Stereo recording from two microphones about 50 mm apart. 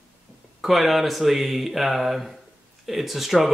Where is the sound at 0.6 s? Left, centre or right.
Centre.